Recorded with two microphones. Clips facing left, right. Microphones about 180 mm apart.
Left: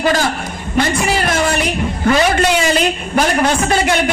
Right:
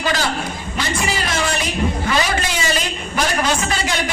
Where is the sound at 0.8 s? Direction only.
55° left (ahead or behind).